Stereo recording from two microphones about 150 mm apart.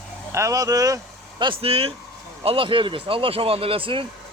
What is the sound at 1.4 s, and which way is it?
Speech, 35° right (ahead or behind).